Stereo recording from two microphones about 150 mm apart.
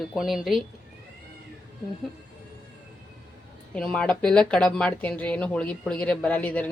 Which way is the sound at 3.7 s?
5° left (ahead or behind).